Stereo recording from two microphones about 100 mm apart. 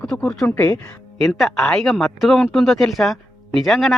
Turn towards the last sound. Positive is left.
turn(degrees=0)  # may be behind; listen again after turning